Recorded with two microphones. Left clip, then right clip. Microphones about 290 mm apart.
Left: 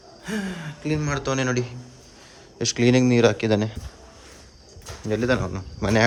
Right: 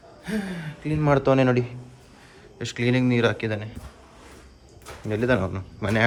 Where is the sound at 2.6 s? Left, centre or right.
Centre.